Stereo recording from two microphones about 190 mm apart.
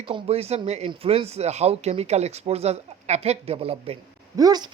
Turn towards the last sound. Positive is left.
turn(degrees=-20)  # may be behind; listen again after turning